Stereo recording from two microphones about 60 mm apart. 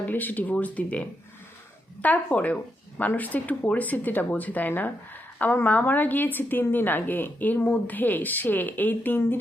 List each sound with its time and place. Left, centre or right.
0.1 s a woman's voice: left